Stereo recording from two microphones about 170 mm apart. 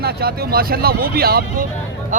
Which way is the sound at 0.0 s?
65° right (ahead or behind).